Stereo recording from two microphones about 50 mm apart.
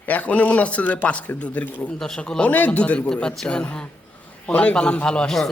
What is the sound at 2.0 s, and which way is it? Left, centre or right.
Speech, centre.